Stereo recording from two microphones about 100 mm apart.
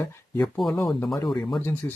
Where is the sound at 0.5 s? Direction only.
Centre (ahead or behind).